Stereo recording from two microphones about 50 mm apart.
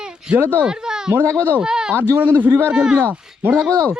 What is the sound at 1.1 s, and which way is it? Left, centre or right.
Speech, right.